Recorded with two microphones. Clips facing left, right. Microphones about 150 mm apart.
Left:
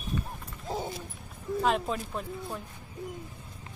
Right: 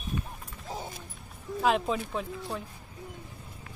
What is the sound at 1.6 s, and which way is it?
Speech, centre (ahead or behind).